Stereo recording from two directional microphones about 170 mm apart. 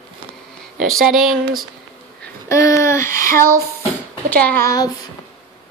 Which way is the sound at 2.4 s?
15° left (ahead or behind).